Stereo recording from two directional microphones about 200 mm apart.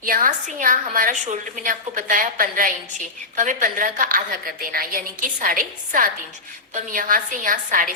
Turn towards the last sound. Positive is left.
turn(degrees=-40)  # may be behind; listen again after turning